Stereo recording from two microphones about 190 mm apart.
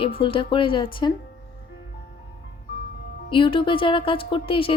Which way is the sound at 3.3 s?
25° left (ahead or behind).